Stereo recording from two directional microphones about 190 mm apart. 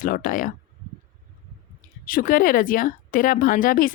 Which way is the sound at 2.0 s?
45° left (ahead or behind).